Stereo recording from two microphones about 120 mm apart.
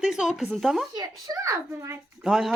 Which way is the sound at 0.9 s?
30° right (ahead or behind).